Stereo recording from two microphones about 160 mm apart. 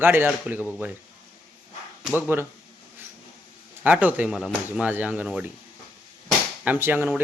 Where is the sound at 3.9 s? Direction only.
10° right (ahead or behind).